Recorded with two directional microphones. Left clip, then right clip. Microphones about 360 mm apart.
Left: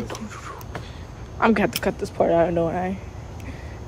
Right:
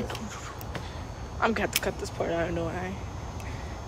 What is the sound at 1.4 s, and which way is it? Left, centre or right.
Speech, centre.